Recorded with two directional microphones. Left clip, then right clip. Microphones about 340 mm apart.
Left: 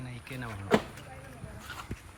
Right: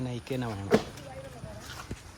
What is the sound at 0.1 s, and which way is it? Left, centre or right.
Speech, centre.